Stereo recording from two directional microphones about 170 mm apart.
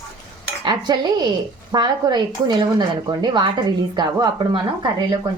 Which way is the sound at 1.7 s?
25° right (ahead or behind).